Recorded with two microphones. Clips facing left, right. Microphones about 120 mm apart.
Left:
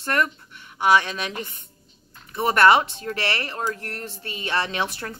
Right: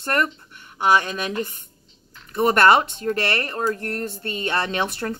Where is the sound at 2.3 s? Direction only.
50° right (ahead or behind).